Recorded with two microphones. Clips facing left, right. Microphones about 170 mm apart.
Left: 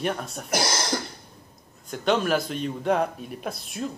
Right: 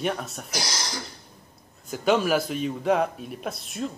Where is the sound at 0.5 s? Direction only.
55° left (ahead or behind).